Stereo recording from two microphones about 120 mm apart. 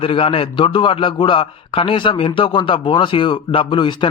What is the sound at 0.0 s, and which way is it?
A man's voice, 50° left (ahead or behind).